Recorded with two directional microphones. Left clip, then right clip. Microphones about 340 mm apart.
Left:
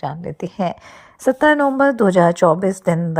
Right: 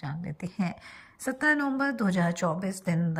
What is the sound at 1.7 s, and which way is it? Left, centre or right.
A woman's voice, left.